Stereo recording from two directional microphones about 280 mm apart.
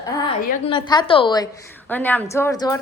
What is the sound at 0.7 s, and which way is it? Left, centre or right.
A woman's voice, centre.